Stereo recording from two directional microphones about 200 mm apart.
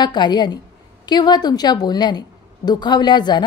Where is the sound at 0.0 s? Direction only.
20° left (ahead or behind).